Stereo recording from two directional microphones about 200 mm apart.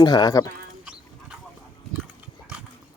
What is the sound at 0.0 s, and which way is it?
Speech, 20° left (ahead or behind).